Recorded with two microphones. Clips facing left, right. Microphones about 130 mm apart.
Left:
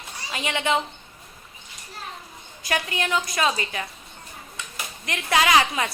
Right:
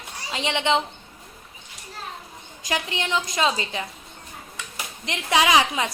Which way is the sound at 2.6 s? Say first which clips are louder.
Left 1 dB; 20° right (ahead or behind).